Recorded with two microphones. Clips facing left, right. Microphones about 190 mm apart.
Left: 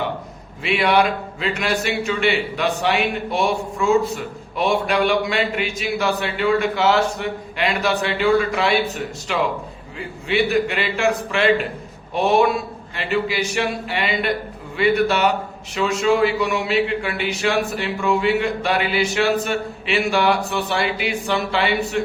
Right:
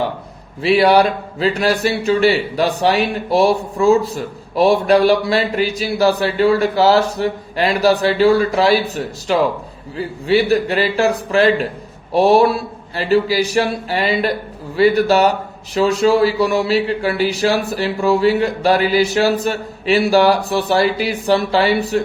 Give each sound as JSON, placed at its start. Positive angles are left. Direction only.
{"t": 0.6, "sound": "a man's voice", "side_deg": -35}